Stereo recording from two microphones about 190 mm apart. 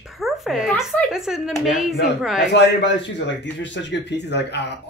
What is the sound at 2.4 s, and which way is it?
Speech, 65° left (ahead or behind).